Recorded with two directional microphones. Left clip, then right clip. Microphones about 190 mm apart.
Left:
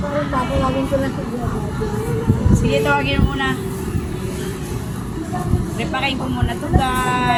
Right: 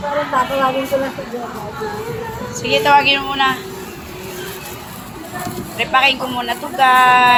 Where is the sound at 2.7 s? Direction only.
30° left (ahead or behind).